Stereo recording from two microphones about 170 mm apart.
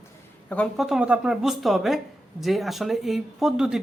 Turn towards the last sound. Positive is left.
turn(degrees=-5)  # may be behind; listen again after turning